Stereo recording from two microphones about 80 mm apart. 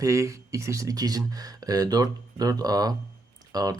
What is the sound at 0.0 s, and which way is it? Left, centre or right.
Speech, right.